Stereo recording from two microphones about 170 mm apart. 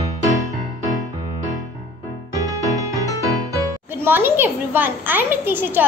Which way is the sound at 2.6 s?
20° left (ahead or behind).